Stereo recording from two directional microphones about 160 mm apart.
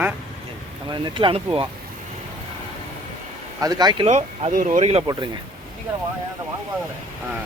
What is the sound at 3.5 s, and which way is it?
Speech, 25° right (ahead or behind).